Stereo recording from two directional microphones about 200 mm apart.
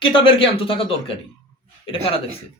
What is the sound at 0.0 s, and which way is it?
A man's voice, 25° left (ahead or behind).